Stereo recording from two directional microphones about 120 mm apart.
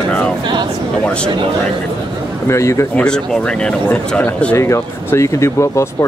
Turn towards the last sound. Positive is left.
turn(degrees=25)  # may be behind; listen again after turning